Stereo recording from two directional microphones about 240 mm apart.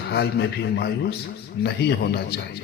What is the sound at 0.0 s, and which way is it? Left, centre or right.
A man's voice, left.